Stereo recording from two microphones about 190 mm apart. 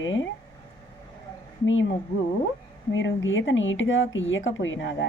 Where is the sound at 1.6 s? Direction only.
90° left.